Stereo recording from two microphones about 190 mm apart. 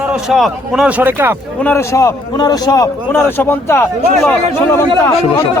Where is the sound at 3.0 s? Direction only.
10° left (ahead or behind).